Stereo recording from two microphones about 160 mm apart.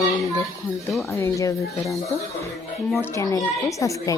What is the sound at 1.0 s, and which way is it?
Speech, 15° left (ahead or behind).